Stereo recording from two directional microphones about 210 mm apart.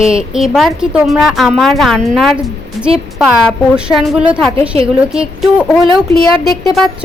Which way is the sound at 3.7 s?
5° right (ahead or behind).